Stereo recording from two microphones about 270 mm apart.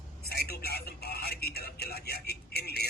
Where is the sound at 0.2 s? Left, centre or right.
Left.